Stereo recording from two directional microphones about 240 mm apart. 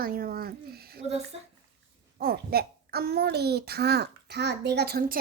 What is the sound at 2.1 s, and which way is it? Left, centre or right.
A child's voice, right.